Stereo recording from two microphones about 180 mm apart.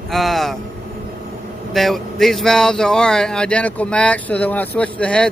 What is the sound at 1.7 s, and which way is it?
Speech, centre (ahead or behind).